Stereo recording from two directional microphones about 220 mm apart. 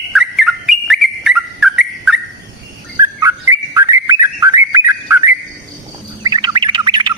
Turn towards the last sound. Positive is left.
turn(degrees=-20)  # may be behind; listen again after turning